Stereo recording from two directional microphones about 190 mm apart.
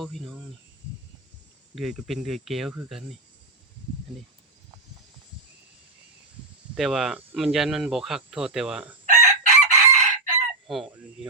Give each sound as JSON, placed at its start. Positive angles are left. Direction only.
{"t": 0.0, "sound": "speech", "side_deg": 0}
{"t": 1.7, "sound": "speech", "side_deg": 0}
{"t": 6.7, "sound": "speech", "side_deg": 0}
{"t": 9.0, "sound": "chicken", "side_deg": -40}
{"t": 10.7, "sound": "speech", "side_deg": 0}